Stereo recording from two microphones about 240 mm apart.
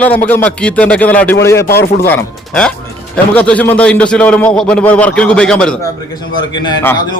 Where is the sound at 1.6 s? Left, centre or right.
Left.